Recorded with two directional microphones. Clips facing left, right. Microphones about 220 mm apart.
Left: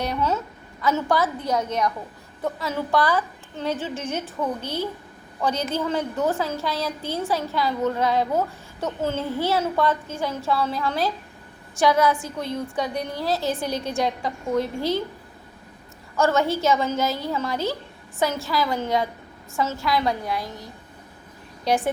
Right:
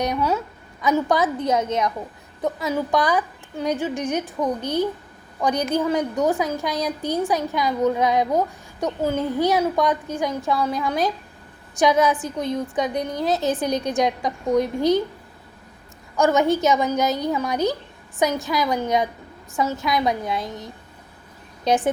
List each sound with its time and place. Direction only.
0.0 s a woman's voice: 15° right (ahead or behind)
16.1 s a woman's voice: 15° right (ahead or behind)
21.7 s a woman's voice: 20° right (ahead or behind)